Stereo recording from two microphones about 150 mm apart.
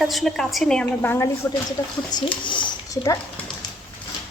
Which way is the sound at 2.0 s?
30° left (ahead or behind).